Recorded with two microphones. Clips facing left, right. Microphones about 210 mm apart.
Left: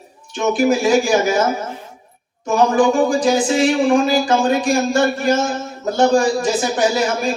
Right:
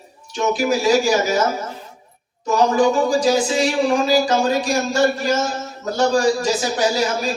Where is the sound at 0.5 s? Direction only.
55° left (ahead or behind).